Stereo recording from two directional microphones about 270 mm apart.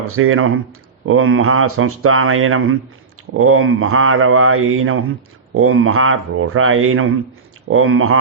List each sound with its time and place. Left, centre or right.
0.2 s speech: right